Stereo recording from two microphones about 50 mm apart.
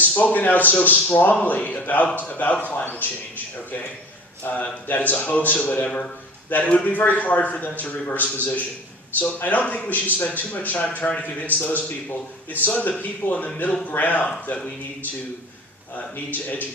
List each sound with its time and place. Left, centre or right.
0.2 s a man's voice: left
5.8 s speech: centre
6.5 s a man's voice: left
16.1 s a man's voice: left